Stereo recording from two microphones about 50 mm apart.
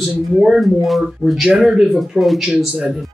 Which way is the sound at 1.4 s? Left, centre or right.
Centre.